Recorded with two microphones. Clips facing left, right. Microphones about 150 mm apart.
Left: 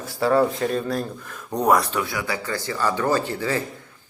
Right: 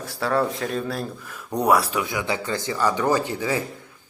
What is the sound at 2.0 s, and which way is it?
A man's voice, 20° right (ahead or behind).